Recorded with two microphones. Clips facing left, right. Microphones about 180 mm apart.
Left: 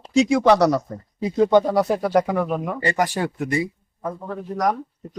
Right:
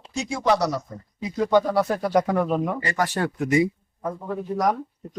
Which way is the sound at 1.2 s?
25° left (ahead or behind).